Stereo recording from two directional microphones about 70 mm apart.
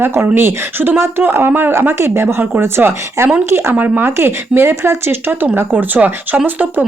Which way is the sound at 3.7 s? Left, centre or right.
Right.